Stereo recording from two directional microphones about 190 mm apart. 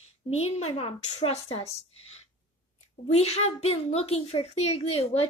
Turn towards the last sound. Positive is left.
turn(degrees=30)  # may be behind; listen again after turning